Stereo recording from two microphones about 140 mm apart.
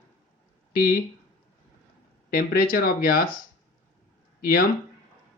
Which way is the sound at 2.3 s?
90° left.